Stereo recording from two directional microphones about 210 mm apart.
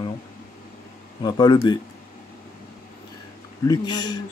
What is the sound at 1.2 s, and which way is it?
Speech, 20° left (ahead or behind).